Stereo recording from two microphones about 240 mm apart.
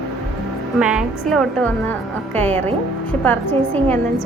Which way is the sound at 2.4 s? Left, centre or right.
Right.